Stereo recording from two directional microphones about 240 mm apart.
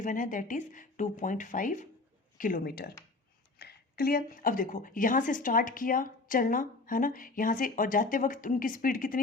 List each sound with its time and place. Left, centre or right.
0.0 s a woman's voice: left